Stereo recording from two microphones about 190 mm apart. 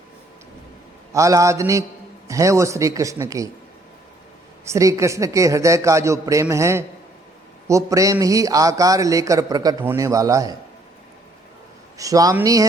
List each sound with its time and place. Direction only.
1.1 s a man's voice: 15° right (ahead or behind)
4.6 s a man's voice: 15° right (ahead or behind)
11.9 s a man's voice: 20° right (ahead or behind)